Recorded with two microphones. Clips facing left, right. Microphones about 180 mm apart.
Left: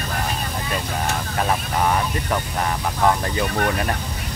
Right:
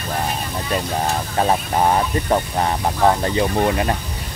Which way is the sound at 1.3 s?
30° right (ahead or behind).